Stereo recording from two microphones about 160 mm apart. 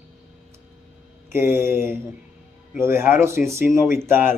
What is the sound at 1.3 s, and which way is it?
Speech, 15° right (ahead or behind).